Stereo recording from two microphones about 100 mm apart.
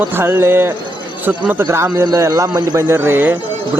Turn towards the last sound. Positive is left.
turn(degrees=-20)  # may be behind; listen again after turning